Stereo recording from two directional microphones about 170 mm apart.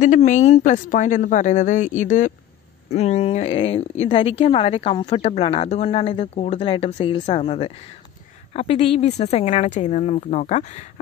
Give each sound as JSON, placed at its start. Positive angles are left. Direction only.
{"t": 0.0, "sound": "speech", "side_deg": 45}